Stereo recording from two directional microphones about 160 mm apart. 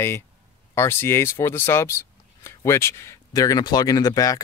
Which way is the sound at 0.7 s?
15° left (ahead or behind).